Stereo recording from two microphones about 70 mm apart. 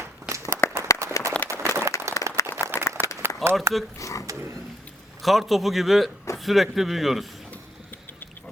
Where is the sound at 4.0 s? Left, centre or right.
Left.